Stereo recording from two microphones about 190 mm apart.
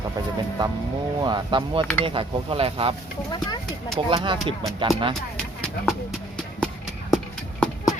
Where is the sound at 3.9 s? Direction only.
25° right (ahead or behind).